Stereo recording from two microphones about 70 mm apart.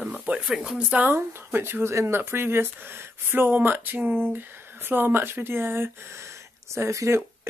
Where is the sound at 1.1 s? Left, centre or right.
Right.